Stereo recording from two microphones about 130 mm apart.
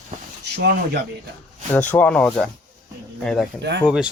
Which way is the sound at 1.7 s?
10° left (ahead or behind).